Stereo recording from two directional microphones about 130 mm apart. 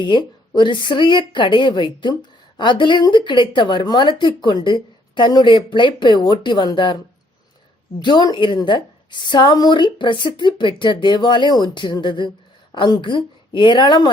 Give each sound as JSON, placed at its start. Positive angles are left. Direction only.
{"t": 0.0, "sound": "speech", "side_deg": 35}